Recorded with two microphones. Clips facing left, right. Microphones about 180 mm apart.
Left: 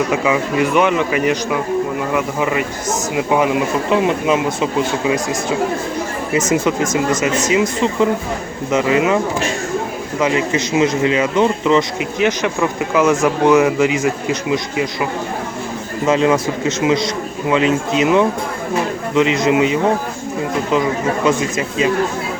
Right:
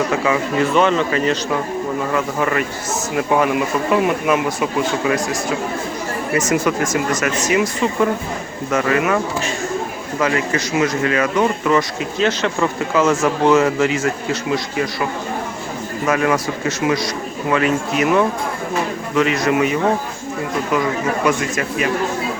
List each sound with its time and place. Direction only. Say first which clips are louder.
0.1 s speech: left 2 dB; 15° left (ahead or behind)
16.0 s speech: left 3 dB; 25° left (ahead or behind)
21.2 s speech: left 2 dB; 20° left (ahead or behind)